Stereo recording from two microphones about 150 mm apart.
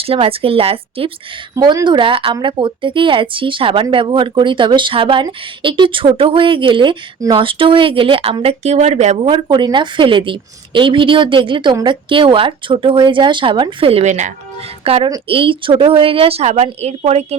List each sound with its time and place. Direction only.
0.0 s speech: 40° right (ahead or behind)
1.5 s speech: 25° right (ahead or behind); by 14.3 s 50° right (ahead or behind)
14.8 s speech: 40° right (ahead or behind)